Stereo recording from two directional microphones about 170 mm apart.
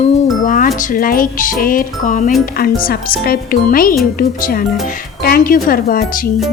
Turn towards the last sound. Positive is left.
turn(degrees=60)  # may be behind; listen again after turning